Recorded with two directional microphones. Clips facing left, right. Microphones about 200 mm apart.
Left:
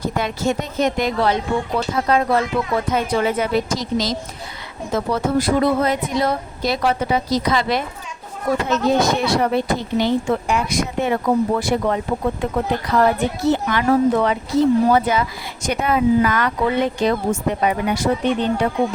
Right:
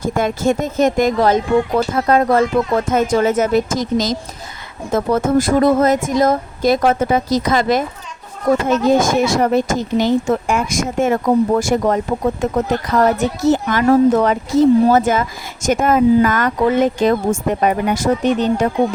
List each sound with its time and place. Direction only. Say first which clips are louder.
0.0 s speech: right 4 dB; 50° right (ahead or behind)
8.9 s speech: right 3 dB; 45° right (ahead or behind)